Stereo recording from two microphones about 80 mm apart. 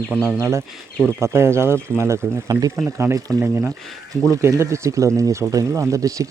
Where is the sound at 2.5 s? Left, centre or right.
Right.